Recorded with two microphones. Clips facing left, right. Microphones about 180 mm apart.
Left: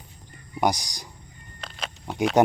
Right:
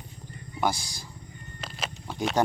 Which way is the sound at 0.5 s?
15° left (ahead or behind).